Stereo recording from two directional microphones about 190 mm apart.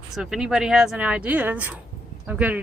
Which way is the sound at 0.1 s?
Centre (ahead or behind).